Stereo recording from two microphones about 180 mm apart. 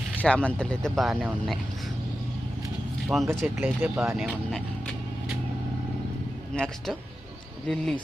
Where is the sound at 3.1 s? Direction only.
Centre (ahead or behind).